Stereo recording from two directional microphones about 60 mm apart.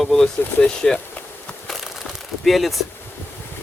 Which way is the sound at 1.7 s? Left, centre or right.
Centre.